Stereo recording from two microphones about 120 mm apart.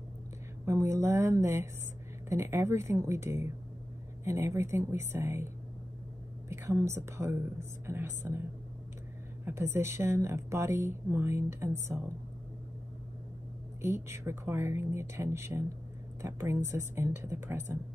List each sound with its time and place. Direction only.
0.7 s speech: 25° right (ahead or behind)
6.5 s speech: 25° right (ahead or behind)
9.4 s speech: 20° right (ahead or behind)
13.7 s speech: 20° right (ahead or behind)